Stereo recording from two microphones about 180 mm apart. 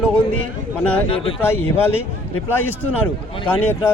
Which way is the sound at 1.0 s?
30° left (ahead or behind).